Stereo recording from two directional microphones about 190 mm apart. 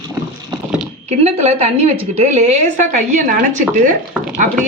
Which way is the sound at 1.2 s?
35° right (ahead or behind).